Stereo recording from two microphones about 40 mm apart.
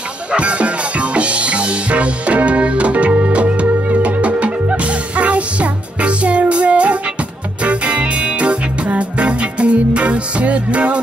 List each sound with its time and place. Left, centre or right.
0.3 s music: right